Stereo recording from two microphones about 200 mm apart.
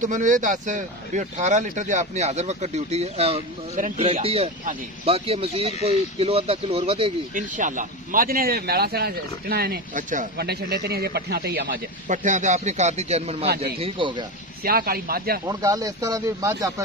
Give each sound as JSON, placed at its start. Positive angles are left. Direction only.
{"t": 0.0, "sound": "speech", "side_deg": -40}
{"t": 10.3, "sound": "speech", "side_deg": -55}
{"t": 12.1, "sound": "speech", "side_deg": -40}
{"t": 14.6, "sound": "speech", "side_deg": -50}
{"t": 15.4, "sound": "speech", "side_deg": -15}